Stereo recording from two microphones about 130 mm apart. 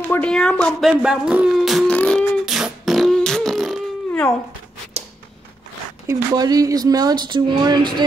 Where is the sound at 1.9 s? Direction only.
10° left (ahead or behind).